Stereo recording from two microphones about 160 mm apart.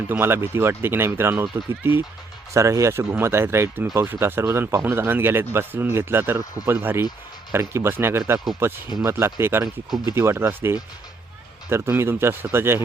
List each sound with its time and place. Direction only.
0.1 s speech: 15° right (ahead or behind)